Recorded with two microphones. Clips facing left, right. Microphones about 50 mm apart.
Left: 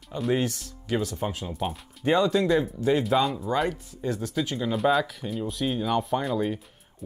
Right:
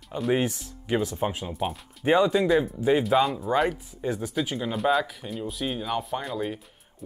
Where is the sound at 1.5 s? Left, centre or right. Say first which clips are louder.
Right 1 dB; centre.